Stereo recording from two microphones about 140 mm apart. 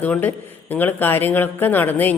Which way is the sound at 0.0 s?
10° left (ahead or behind).